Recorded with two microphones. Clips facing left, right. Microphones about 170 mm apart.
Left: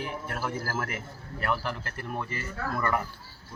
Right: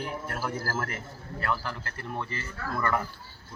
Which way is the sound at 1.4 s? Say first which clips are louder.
Left 2 dB; 20° left (ahead or behind).